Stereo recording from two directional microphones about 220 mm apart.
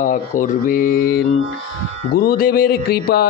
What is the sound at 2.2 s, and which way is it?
A man's voice, 40° left (ahead or behind).